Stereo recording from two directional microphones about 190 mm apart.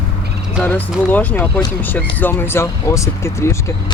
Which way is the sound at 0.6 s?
10° left (ahead or behind).